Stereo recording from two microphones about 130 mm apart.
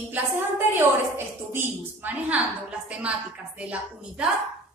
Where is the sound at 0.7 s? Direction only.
15° right (ahead or behind).